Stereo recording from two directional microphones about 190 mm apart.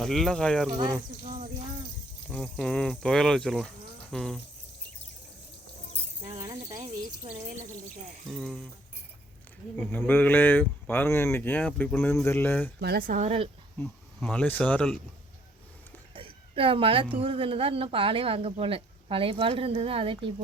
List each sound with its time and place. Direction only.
0.0 s speech: centre (ahead or behind)
1.2 s speech: 45° right (ahead or behind)
2.3 s speech: 5° left (ahead or behind)
6.3 s a sound: 15° right (ahead or behind)
8.3 s speech: centre (ahead or behind)
9.7 s speech: 10° left (ahead or behind)
12.8 s speech: 50° right (ahead or behind); by 13.5 s 35° right (ahead or behind)
13.7 s speech: 5° left (ahead or behind)
16.1 s a sound: 30° right (ahead or behind)
17.2 s speech: 30° right (ahead or behind)